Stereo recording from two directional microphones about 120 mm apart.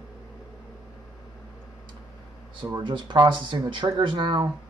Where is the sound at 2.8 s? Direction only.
40° right (ahead or behind).